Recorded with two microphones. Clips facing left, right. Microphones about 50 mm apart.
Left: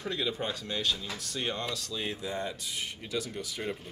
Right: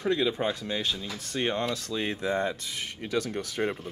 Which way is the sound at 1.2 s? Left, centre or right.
Right.